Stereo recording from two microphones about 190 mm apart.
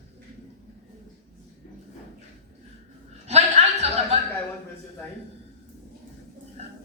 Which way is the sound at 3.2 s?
35° right (ahead or behind).